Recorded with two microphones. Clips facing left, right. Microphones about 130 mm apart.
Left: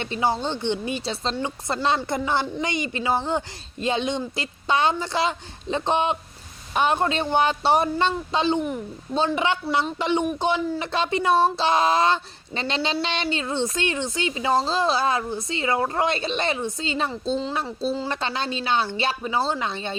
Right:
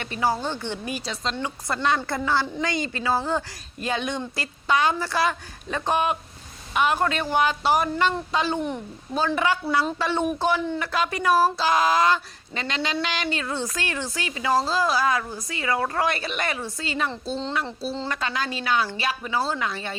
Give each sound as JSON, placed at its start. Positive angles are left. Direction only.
{"t": 0.0, "sound": "speech", "side_deg": 25}